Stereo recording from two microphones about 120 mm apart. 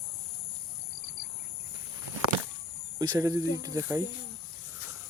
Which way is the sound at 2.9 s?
35° right (ahead or behind).